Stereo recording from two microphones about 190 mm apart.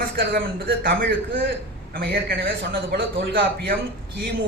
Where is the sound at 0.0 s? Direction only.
50° right (ahead or behind).